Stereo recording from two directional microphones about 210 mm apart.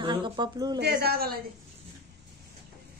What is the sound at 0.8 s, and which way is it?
Speech, 50° right (ahead or behind).